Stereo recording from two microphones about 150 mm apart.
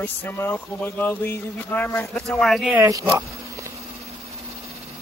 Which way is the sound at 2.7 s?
20° right (ahead or behind).